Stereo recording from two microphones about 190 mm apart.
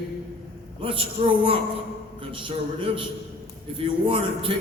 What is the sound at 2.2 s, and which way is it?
A man's voice, 25° right (ahead or behind).